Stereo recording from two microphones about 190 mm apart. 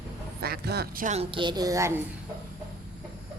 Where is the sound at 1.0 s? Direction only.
30° right (ahead or behind); by 2.0 s 15° right (ahead or behind).